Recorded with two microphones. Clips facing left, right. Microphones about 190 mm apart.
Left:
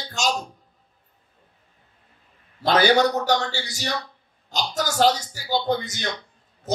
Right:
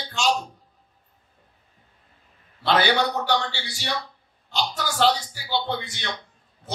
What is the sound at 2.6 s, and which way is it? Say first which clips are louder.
A man's voice: left 4 dB; 40° left (ahead or behind).